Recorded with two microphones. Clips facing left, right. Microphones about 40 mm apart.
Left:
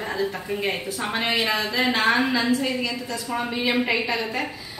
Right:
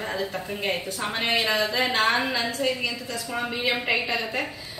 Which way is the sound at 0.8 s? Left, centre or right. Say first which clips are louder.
Left 2 dB; centre.